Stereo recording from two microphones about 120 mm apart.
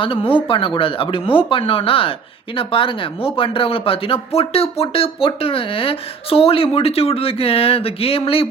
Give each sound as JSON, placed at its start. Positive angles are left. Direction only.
{"t": 0.0, "sound": "speech", "side_deg": 45}